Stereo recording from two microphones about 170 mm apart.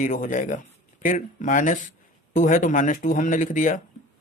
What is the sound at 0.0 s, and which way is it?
Speech, 50° left (ahead or behind).